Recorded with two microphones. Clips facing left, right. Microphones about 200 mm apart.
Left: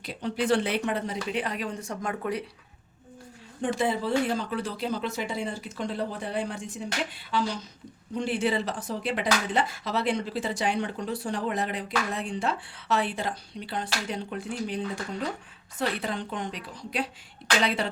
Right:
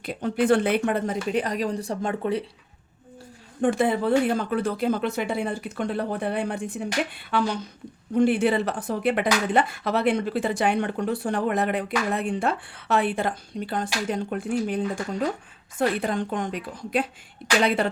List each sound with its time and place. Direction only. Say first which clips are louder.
0.0 s speech: right 5 dB; 50° right (ahead or behind); by 2.4 s 30° right (ahead or behind)
3.6 s speech: right 5 dB; 55° right (ahead or behind)
15.8 s speech: right 6 dB; 50° right (ahead or behind)